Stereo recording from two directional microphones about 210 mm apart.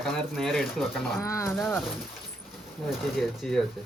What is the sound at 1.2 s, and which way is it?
Speech, 15° left (ahead or behind).